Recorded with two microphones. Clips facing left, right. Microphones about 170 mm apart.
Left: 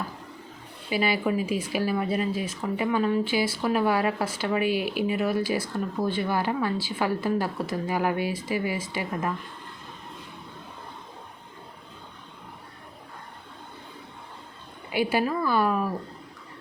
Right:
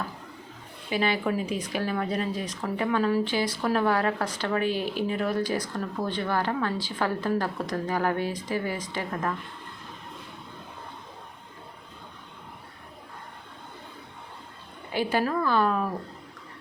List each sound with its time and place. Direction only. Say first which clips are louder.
0.9 s speech: left 1 dB; 5° left (ahead or behind)
15.2 s speech: even; 5° left (ahead or behind)